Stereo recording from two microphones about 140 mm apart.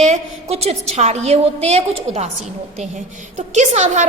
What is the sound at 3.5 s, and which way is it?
Speech, 55° right (ahead or behind).